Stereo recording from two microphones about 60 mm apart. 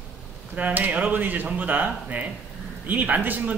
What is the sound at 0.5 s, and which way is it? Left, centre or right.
A man's voice, right.